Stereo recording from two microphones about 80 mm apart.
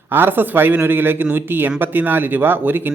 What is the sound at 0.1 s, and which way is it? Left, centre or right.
Speech, right.